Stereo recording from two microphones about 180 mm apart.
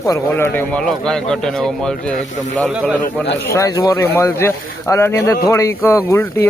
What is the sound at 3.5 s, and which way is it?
Speech, 20° left (ahead or behind).